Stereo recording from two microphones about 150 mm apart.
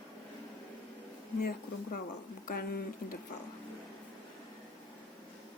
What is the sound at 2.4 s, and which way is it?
Speech, 75° left (ahead or behind).